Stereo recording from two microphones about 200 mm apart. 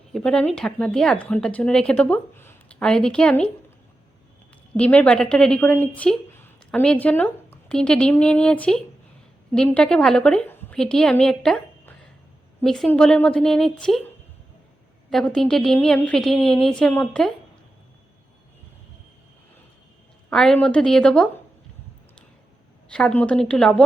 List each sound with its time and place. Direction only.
0.1 s speech: 5° left (ahead or behind)
4.8 s a woman's voice: 5° left (ahead or behind)
15.1 s speech: 5° left (ahead or behind)
20.3 s speech: 5° left (ahead or behind)
22.9 s speech: 5° left (ahead or behind)